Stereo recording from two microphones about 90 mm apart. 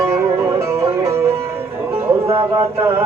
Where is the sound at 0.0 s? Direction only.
30° right (ahead or behind).